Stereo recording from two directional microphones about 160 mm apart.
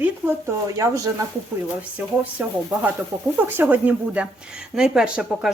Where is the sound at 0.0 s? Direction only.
15° right (ahead or behind).